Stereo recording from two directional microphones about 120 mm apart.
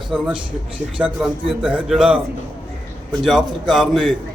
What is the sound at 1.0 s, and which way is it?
A man's voice, 10° right (ahead or behind).